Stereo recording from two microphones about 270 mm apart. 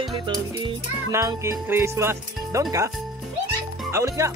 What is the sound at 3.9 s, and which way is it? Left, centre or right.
Music, centre.